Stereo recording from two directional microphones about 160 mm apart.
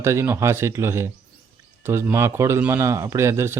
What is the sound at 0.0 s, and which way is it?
Speech, 15° right (ahead or behind).